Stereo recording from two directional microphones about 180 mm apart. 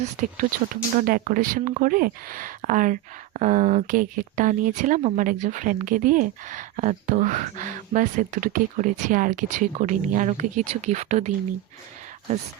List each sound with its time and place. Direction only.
0.0 s speech: 45° right (ahead or behind)